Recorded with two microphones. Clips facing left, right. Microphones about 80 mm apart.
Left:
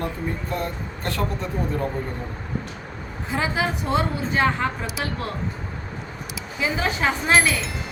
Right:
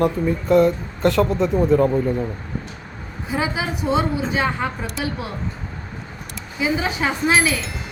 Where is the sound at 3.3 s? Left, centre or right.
Centre.